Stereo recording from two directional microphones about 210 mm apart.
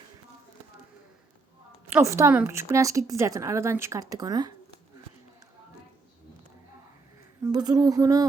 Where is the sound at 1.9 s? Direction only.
15° right (ahead or behind).